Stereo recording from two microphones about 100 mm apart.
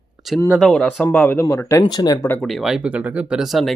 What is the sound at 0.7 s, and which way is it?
Speech, 10° left (ahead or behind).